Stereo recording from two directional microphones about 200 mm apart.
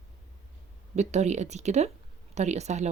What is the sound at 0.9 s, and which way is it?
Speech, 35° right (ahead or behind).